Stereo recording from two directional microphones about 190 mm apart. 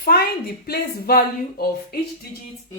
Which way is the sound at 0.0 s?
50° left (ahead or behind).